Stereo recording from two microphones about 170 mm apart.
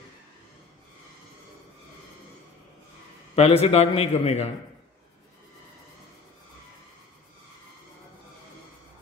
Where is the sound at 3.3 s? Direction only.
35° left (ahead or behind).